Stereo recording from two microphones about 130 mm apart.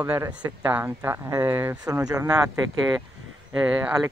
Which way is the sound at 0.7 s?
20° right (ahead or behind).